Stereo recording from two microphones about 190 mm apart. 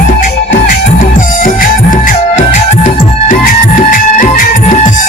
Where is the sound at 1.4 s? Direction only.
45° left (ahead or behind).